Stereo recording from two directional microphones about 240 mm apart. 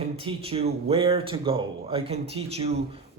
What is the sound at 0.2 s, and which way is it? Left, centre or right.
Speech, right.